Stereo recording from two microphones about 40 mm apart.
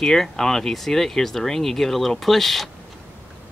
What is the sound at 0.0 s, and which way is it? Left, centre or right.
Speech, centre.